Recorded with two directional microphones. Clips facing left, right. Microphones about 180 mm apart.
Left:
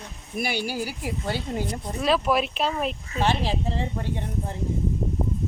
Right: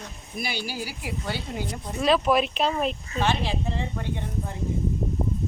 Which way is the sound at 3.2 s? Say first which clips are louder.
Left 2 dB; 35° left (ahead or behind).